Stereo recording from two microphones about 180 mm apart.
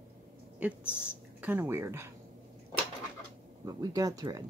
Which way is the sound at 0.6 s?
5° right (ahead or behind).